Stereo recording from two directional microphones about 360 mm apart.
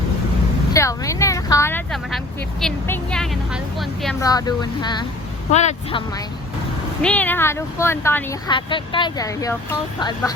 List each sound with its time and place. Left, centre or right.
0.7 s vehicle: centre
5.5 s speech: centre
7.0 s speech: centre